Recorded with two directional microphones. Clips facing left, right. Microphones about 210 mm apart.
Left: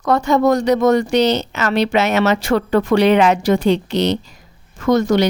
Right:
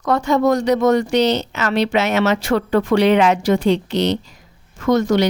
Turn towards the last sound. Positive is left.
turn(degrees=35)  # may be behind; listen again after turning